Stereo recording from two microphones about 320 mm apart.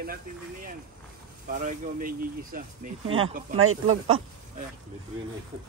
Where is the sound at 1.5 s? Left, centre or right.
Right.